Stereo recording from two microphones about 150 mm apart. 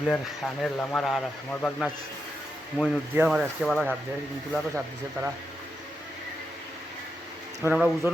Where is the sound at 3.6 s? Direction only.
5° right (ahead or behind).